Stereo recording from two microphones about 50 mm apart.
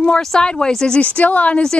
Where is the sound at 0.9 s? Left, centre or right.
Left.